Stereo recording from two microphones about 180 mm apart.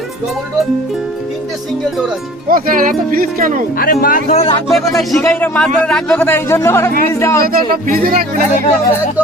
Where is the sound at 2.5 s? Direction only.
50° right (ahead or behind).